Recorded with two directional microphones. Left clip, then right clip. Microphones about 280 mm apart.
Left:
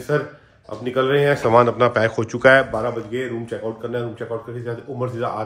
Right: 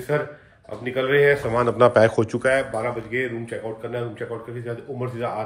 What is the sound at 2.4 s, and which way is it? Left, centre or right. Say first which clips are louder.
Speech: left 9 dB; left.